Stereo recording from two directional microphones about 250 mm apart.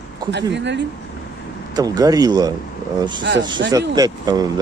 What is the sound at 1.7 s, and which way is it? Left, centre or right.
Speech, centre.